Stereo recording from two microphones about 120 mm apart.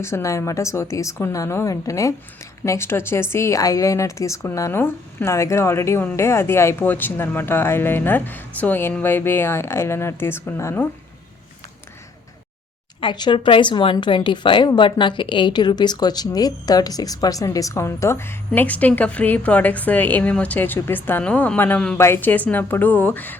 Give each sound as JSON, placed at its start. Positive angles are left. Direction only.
{"t": 0.0, "sound": "speech", "side_deg": 25}
{"t": 13.0, "sound": "a woman's voice", "side_deg": 40}